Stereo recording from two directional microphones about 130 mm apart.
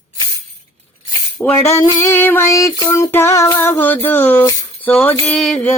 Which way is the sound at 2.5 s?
25° left (ahead or behind).